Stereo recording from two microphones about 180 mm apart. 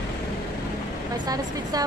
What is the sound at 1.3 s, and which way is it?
Speech, 20° right (ahead or behind).